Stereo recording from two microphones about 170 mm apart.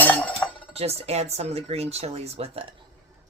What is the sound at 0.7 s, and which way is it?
Speech, 40° right (ahead or behind).